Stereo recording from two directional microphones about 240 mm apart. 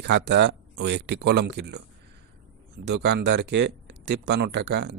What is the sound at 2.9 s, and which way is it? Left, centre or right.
Speech, right.